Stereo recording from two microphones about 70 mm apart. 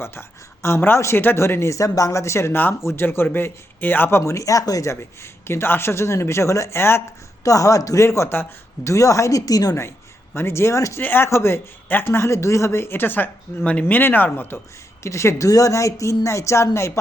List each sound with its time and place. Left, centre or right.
0.0 s a woman's voice: left
4.2 s speech: left
7.4 s a woman's voice: left
10.3 s speech: left
11.0 s speech: left
15.0 s a woman's voice: left
15.4 s a woman's voice: left